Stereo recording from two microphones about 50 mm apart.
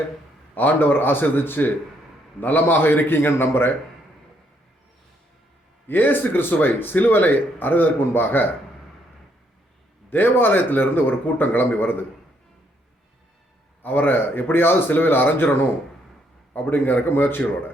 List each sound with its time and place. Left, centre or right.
0.5 s a man's voice: left
5.9 s speech: left
10.1 s speech: left
13.8 s speech: left
16.6 s speech: left